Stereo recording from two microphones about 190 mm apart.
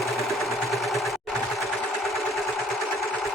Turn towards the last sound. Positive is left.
turn(degrees=0)  # may be behind; listen again after turning